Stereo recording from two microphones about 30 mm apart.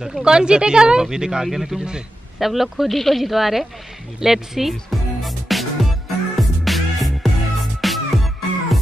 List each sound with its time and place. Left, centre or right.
0.2 s speech: right
1.4 s speech: centre
2.9 s speech: centre
5.2 s music: centre